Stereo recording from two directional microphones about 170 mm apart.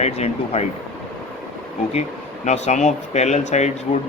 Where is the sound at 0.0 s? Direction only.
40° left (ahead or behind).